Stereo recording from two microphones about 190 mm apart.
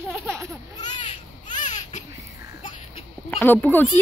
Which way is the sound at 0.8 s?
25° left (ahead or behind).